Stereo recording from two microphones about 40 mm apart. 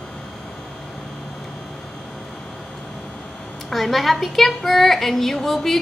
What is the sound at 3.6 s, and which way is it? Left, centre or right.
A woman's voice, centre.